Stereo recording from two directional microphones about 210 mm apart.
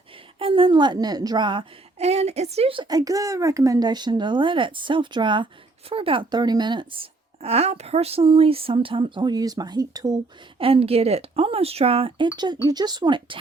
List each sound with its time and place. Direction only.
0.3 s a woman's voice: 25° right (ahead or behind)